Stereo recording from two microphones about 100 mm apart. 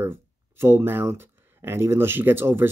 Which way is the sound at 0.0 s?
25° right (ahead or behind).